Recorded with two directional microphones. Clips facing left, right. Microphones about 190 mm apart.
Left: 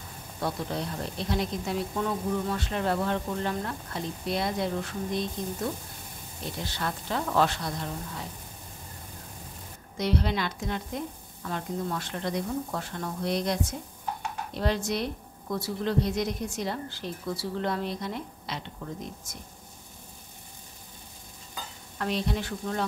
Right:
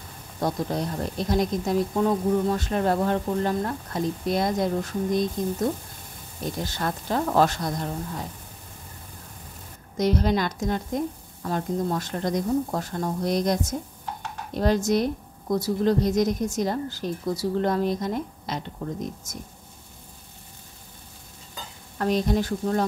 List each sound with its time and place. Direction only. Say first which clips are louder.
0.4 s speech: right 5 dB; 40° right (ahead or behind)
6.6 s speech: right 2 dB; 45° right (ahead or behind)
9.9 s speech: right 5 dB; 45° right (ahead or behind)
21.9 s speech: right 7 dB; 45° right (ahead or behind)